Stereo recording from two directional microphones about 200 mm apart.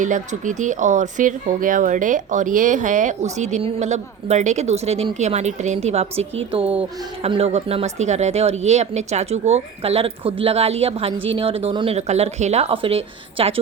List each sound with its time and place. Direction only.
0.0 s speech: 40° right (ahead or behind)